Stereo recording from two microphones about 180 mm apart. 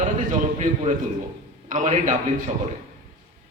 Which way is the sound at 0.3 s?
40° right (ahead or behind).